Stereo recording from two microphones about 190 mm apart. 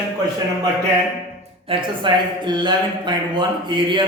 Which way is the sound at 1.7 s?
25° right (ahead or behind).